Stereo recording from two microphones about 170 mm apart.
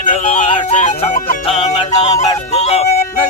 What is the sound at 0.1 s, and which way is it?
Music, 45° left (ahead or behind).